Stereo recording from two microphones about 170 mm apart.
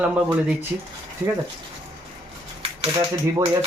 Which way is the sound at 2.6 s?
35° right (ahead or behind).